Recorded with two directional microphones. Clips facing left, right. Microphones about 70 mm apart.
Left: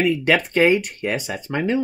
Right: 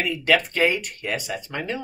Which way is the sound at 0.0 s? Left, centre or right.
Left.